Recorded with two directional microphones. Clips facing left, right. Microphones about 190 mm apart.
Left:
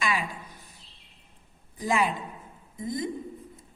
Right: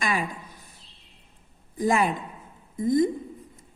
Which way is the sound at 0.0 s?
45° right (ahead or behind).